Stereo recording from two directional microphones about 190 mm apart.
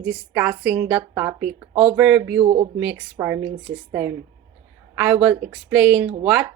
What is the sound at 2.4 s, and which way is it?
Speech, 25° right (ahead or behind).